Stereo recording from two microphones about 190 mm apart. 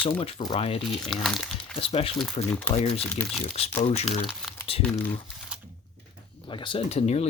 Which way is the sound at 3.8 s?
35° left (ahead or behind).